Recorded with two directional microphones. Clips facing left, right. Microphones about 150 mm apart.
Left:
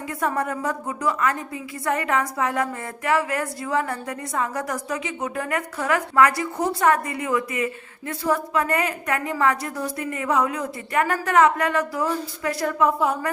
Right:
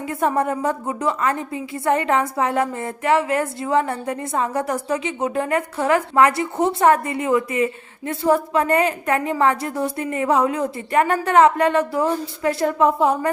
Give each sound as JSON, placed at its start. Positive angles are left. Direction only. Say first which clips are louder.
{"t": 0.1, "sound": "a woman's voice", "louder": "right 5 dB", "side_deg": -25}